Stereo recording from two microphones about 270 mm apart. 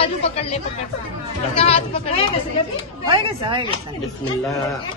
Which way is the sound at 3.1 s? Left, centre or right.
Centre.